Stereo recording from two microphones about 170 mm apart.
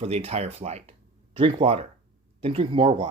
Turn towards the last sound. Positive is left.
turn(degrees=-30)  # may be behind; listen again after turning